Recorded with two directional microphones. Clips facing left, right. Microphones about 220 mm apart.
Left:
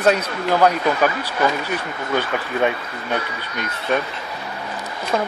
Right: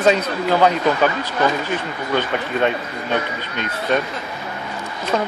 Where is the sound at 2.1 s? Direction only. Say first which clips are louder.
Right 1 dB; 10° left (ahead or behind).